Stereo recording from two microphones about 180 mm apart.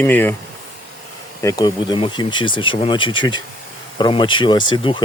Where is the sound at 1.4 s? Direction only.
20° left (ahead or behind).